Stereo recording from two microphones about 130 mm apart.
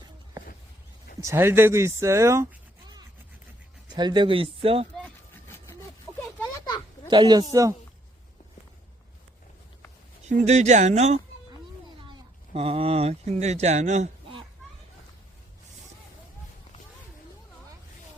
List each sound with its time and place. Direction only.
1.2 s speech: 20° right (ahead or behind)
3.9 s speech: 35° right (ahead or behind)
5.0 s a sound: 20° left (ahead or behind)
6.4 s a sound: 35° left (ahead or behind)
7.1 s a man's voice: 35° right (ahead or behind)
10.2 s speech: 60° right (ahead or behind)
12.5 s speech: 50° right (ahead or behind)